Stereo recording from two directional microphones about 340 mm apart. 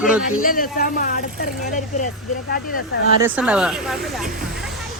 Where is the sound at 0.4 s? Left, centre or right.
Left.